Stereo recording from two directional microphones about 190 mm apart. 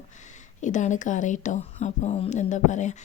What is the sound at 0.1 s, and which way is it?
Speech, 40° left (ahead or behind).